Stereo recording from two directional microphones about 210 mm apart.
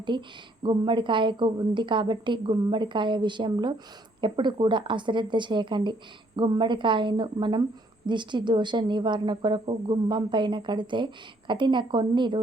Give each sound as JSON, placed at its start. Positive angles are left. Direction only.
{"t": 0.1, "sound": "speech", "side_deg": -20}